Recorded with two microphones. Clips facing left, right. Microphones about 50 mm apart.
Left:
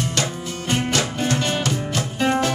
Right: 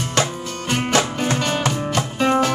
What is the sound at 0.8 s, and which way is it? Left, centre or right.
Music, right.